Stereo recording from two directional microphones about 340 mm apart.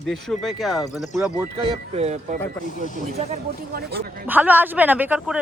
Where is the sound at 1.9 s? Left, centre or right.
Centre.